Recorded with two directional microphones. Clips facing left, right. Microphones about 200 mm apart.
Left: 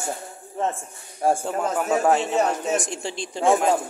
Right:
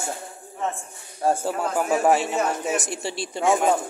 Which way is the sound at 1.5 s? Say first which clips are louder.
Even; 5° right (ahead or behind).